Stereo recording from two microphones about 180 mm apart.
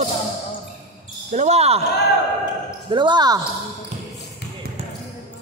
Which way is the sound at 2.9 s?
25° right (ahead or behind).